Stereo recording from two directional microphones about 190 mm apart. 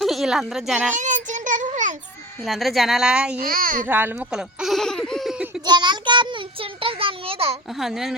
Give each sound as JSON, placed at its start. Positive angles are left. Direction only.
{"t": 0.0, "sound": "speech", "side_deg": 0}
{"t": 0.9, "sound": "child singing", "side_deg": -40}
{"t": 2.4, "sound": "speech", "side_deg": 0}
{"t": 3.4, "sound": "a child's voice", "side_deg": -50}
{"t": 3.8, "sound": "a sound", "side_deg": -10}
{"t": 5.6, "sound": "child singing", "side_deg": -25}
{"t": 7.7, "sound": "speech", "side_deg": 0}